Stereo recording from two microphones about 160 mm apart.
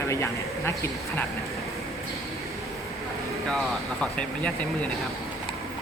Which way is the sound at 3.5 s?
5° left (ahead or behind).